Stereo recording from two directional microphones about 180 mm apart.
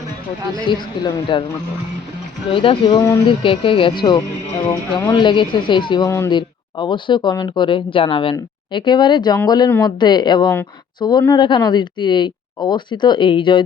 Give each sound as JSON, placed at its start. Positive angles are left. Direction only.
{"t": 0.5, "sound": "speech", "side_deg": 25}
{"t": 2.5, "sound": "speech", "side_deg": 30}